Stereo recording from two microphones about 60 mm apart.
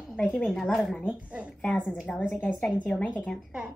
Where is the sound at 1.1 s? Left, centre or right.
Right.